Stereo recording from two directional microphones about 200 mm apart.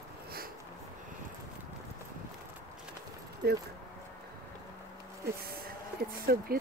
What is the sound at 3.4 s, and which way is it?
Speech, 55° right (ahead or behind).